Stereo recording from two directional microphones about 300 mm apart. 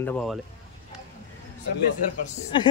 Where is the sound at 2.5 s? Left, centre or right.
Centre.